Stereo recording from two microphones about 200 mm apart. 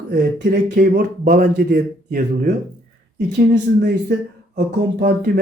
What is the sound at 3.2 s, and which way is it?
Speech, 40° right (ahead or behind).